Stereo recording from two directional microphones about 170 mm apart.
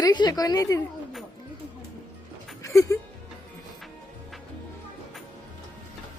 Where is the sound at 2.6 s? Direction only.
20° left (ahead or behind).